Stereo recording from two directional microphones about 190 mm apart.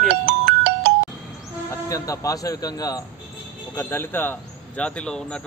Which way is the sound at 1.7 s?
15° left (ahead or behind).